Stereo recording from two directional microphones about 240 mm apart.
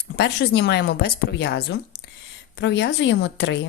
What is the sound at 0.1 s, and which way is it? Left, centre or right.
Speech, left.